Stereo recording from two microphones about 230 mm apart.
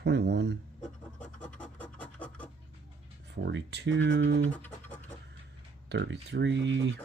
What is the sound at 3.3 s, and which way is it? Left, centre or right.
Speech, right.